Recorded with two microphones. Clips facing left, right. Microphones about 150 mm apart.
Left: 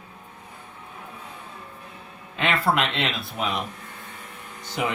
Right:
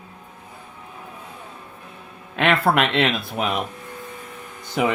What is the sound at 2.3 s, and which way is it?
Speech, 60° right (ahead or behind).